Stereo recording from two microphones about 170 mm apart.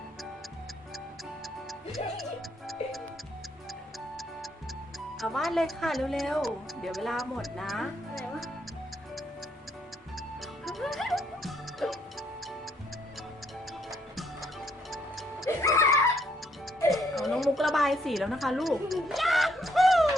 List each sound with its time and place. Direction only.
5.2 s speech: centre (ahead or behind)
10.7 s music: centre (ahead or behind)
14.2 s music: centre (ahead or behind)
15.4 s music: 15° left (ahead or behind)
16.9 s a sound: centre (ahead or behind)